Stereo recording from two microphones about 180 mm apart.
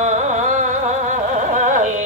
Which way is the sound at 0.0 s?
40° right (ahead or behind).